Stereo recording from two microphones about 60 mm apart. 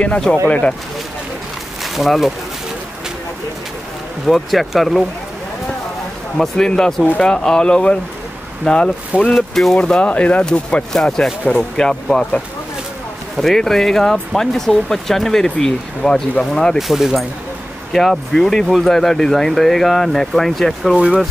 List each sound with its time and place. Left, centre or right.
0.5 s speech: left
1.8 s speech: centre
4.3 s speech: centre
6.3 s speech: centre
9.3 s speech: centre
9.8 s speech: centre
13.4 s speech: centre
16.7 s speech: centre